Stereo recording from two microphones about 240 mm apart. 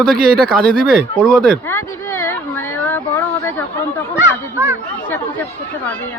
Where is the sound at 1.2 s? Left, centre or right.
Centre.